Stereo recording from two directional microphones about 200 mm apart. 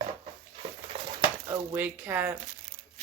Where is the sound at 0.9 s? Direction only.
25° right (ahead or behind).